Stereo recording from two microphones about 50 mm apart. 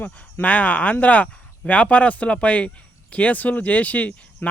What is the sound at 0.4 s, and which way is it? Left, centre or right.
Speech, left.